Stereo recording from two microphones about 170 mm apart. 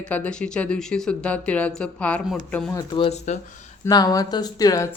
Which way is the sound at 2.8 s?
30° left (ahead or behind).